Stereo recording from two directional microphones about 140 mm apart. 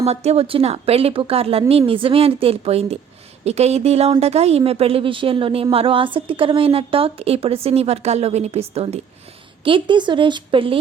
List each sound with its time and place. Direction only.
0.0 s a woman's voice: 50° right (ahead or behind)
9.6 s a woman's voice: 35° right (ahead or behind)